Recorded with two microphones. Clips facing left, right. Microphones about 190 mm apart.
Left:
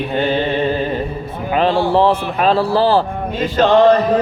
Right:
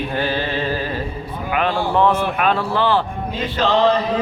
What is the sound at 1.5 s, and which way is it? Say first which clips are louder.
A man's voice: left 5 dB; 30° left (ahead or behind).